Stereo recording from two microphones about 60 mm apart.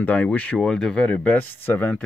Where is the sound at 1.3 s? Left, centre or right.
Left.